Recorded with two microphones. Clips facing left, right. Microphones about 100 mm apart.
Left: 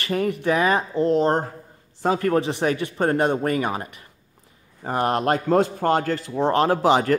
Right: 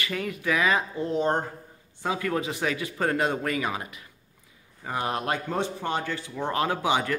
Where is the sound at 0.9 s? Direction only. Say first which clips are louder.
Left 8 dB; 90° left.